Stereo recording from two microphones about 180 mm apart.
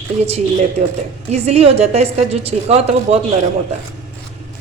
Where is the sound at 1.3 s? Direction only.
35° right (ahead or behind).